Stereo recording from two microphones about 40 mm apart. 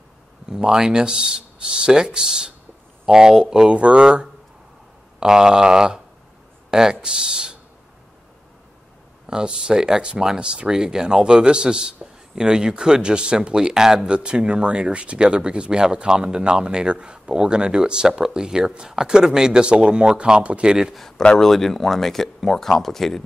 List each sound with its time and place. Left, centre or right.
0.5 s speech: centre
9.2 s speech: centre
21.4 s speech: centre